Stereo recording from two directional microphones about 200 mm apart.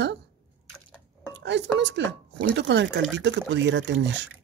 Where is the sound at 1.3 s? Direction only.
65° right (ahead or behind).